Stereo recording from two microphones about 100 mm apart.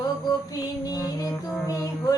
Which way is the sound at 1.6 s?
35° left (ahead or behind).